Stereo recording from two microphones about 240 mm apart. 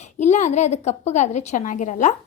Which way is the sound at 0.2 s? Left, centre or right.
Left.